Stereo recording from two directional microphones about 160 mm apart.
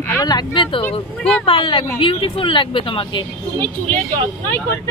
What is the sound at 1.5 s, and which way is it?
Speech, 30° left (ahead or behind).